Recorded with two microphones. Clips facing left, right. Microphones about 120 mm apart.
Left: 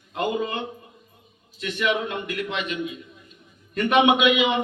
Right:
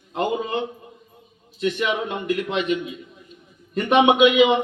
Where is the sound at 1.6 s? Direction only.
30° right (ahead or behind).